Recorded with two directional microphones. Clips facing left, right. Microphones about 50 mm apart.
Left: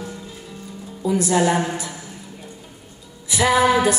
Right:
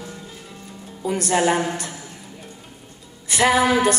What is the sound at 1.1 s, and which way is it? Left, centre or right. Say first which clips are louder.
Speech: left 2 dB; right.